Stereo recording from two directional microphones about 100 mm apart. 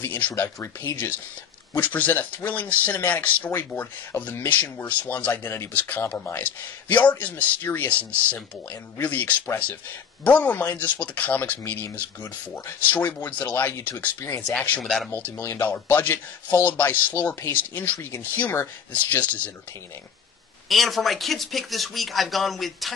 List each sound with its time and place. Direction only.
0.0 s speech: 20° left (ahead or behind)
1.8 s speech: 15° left (ahead or behind)
14.8 s speech: 5° left (ahead or behind)
15.0 s speech: 20° left (ahead or behind)
20.6 s speech: centre (ahead or behind)